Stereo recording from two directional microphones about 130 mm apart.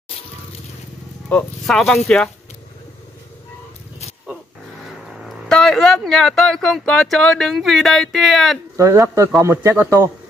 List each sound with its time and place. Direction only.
1.3 s speech: 5° left (ahead or behind)
5.1 s speech: centre (ahead or behind)
8.7 s a man's voice: 20° right (ahead or behind)